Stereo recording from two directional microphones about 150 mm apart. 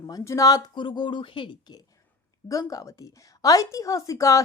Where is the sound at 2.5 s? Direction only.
20° left (ahead or behind).